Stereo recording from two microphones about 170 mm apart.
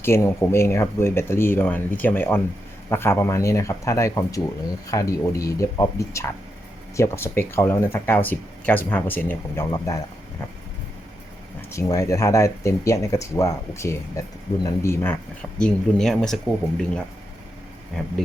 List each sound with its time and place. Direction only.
0.0 s speech: 15° left (ahead or behind)
11.7 s speech: 15° left (ahead or behind)